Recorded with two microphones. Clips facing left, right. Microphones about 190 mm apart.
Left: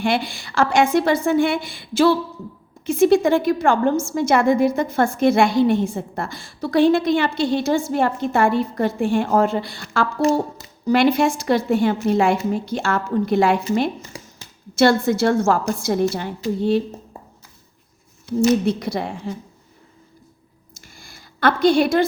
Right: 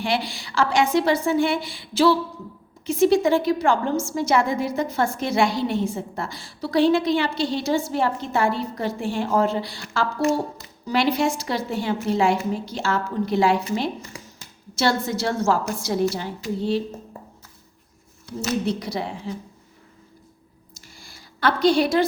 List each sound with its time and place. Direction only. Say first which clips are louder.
0.0 s a woman's voice: left 4 dB; 50° left (ahead or behind)
18.6 s a woman's voice: left 4 dB; 55° left (ahead or behind)
20.7 s a sound: left 2 dB; 55° left (ahead or behind)